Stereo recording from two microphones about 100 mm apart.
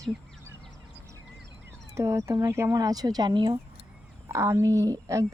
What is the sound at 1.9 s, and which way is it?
Speech, 30° right (ahead or behind).